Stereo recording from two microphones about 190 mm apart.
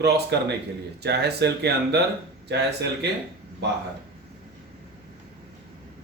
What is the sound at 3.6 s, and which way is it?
Speech, 65° right (ahead or behind).